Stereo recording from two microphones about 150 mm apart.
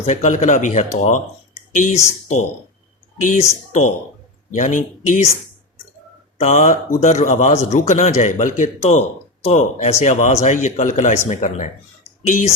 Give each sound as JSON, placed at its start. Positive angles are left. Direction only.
{"t": 0.0, "sound": "a man's voice", "side_deg": 50}
{"t": 3.2, "sound": "a man's voice", "side_deg": 60}
{"t": 6.4, "sound": "a man's voice", "side_deg": 55}
{"t": 12.2, "sound": "a man's voice", "side_deg": 50}